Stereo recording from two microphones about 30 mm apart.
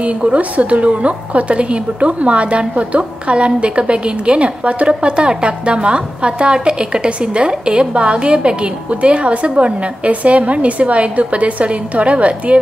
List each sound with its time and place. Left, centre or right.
0.0 s a woman's voice: right